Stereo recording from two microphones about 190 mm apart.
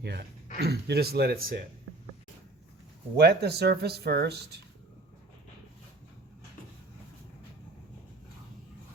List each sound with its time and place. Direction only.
0.0 s speech: 60° right (ahead or behind)
3.2 s speech: 60° right (ahead or behind)